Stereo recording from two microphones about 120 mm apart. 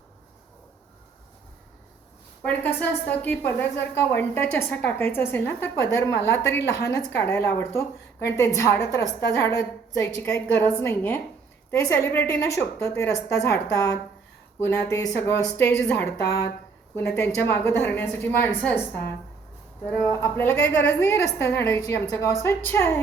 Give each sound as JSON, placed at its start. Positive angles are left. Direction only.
{"t": 2.4, "sound": "a woman's voice", "side_deg": 15}
{"t": 20.1, "sound": "a woman's voice", "side_deg": 20}